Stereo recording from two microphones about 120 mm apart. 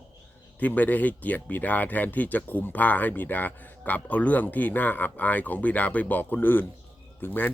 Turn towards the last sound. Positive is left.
turn(degrees=15)  # may be behind; listen again after turning